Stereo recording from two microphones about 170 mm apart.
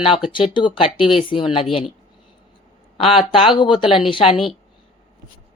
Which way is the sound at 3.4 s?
30° left (ahead or behind).